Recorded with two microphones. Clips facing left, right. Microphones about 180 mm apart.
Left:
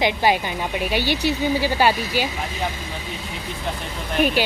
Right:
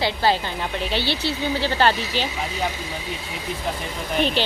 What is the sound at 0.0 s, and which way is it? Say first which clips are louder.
A woman's voice: left 2 dB; 15° left (ahead or behind).